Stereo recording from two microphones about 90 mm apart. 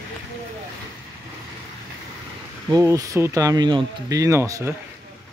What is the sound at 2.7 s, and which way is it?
Speech, 40° right (ahead or behind).